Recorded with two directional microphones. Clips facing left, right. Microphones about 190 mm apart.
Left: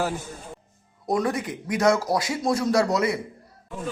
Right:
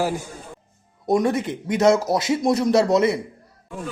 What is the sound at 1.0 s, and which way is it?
A man's voice, 25° right (ahead or behind).